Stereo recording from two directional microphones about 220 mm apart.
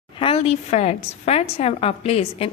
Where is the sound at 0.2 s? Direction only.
25° left (ahead or behind).